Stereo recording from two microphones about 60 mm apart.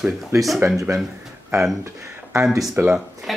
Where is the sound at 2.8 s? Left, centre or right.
Right.